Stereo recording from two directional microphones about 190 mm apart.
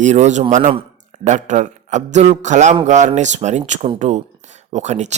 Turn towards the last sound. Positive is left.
turn(degrees=-40)  # may be behind; listen again after turning